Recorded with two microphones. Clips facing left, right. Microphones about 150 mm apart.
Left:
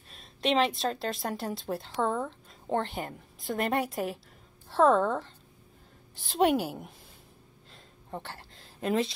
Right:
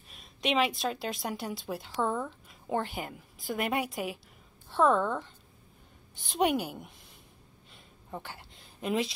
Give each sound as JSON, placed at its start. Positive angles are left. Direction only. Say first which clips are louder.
{"t": 0.2, "sound": "a woman's voice", "louder": "left 2 dB", "side_deg": 0}
{"t": 2.0, "sound": "speech", "louder": "left 1 dB", "side_deg": 25}
{"t": 2.7, "sound": "a woman's voice", "louder": "left 2 dB", "side_deg": -5}
{"t": 6.1, "sound": "a woman's voice", "louder": "left 3 dB", "side_deg": 0}
{"t": 7.7, "sound": "a sound", "louder": "left 2 dB", "side_deg": -5}